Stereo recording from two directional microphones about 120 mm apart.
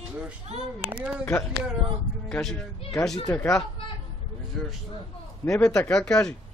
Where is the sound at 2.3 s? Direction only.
5° left (ahead or behind).